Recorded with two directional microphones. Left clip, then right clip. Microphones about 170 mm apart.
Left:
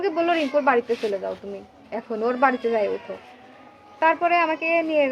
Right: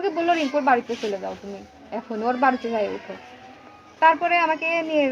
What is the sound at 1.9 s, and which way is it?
Speech, 25° left (ahead or behind).